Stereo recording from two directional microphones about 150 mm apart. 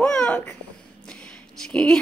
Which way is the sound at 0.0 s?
5° left (ahead or behind).